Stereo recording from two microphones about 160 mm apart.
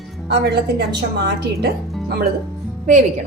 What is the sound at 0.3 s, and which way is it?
Speech, 90° right.